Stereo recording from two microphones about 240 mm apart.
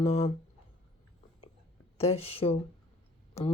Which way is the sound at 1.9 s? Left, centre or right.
Left.